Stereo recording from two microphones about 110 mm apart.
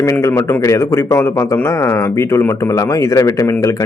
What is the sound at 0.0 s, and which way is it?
Speech, 30° left (ahead or behind).